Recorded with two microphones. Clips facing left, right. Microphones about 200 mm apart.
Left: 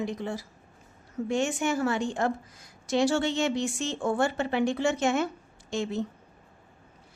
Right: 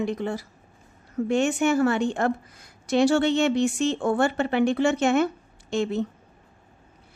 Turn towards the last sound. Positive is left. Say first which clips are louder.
# right 5 dB
turn(degrees=-60)  # may be behind; listen again after turning